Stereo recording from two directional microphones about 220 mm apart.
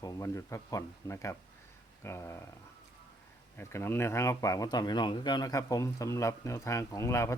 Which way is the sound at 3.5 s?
10° left (ahead or behind).